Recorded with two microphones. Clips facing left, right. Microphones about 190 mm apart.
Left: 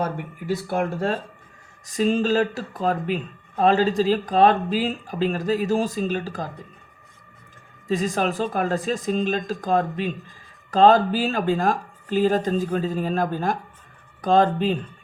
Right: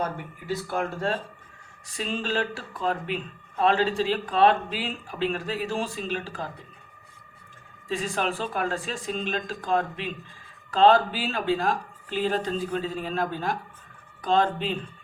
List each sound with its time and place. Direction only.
1.9 s speech: 45° left (ahead or behind)
7.9 s speech: 40° left (ahead or behind)